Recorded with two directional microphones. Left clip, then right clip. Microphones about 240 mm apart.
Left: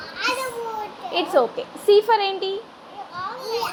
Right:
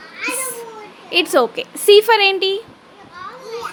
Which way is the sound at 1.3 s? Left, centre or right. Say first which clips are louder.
Right 4 dB; right.